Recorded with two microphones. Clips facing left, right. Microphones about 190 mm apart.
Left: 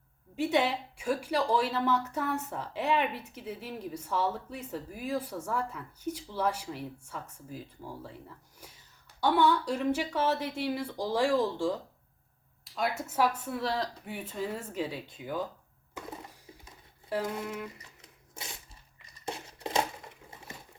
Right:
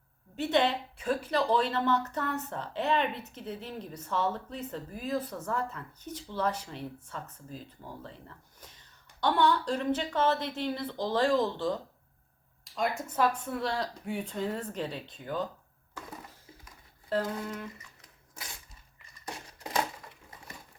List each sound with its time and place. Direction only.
0.3 s speech: 10° left (ahead or behind)
8.6 s speech: 5° left (ahead or behind)
19.2 s a sound: 25° left (ahead or behind)